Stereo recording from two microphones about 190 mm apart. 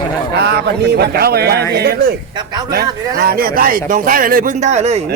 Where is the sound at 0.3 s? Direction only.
60° right (ahead or behind); by 5.0 s 35° right (ahead or behind).